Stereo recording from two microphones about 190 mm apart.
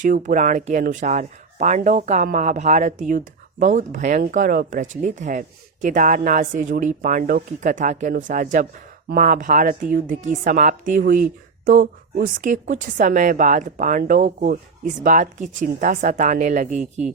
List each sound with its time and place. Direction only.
0.0 s speech: 45° right (ahead or behind)